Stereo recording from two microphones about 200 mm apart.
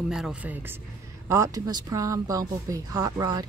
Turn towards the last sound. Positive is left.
turn(degrees=-20)  # may be behind; listen again after turning